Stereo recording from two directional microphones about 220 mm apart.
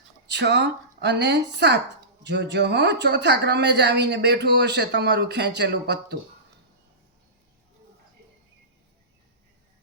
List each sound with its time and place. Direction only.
0.3 s a woman's voice: 50° right (ahead or behind)